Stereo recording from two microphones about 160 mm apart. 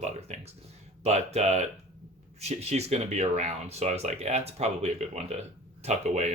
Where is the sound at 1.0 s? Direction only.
45° right (ahead or behind).